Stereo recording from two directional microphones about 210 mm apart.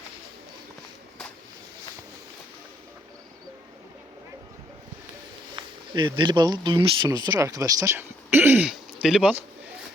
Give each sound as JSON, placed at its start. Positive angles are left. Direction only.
{"t": 5.5, "sound": "speech", "side_deg": -20}